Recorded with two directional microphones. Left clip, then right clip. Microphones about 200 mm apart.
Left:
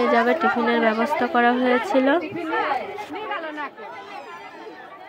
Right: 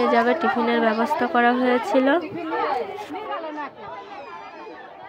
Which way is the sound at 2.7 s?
Centre (ahead or behind).